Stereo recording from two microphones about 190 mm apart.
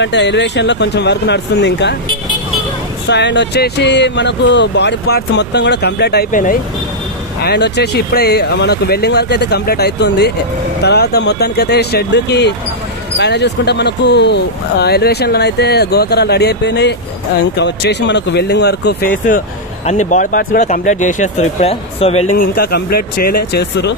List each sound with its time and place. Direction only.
0.0 s speech: 65° left (ahead or behind)
3.1 s speech: 65° left (ahead or behind)
6.3 s speech: 45° left (ahead or behind)
7.4 s speech: 60° left (ahead or behind)
19.9 s speech: 40° left (ahead or behind)
22.6 s speech: 55° left (ahead or behind)